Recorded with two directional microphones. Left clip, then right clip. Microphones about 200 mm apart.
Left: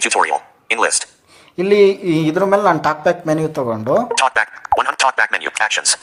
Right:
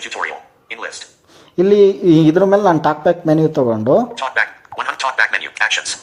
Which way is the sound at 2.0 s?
25° right (ahead or behind).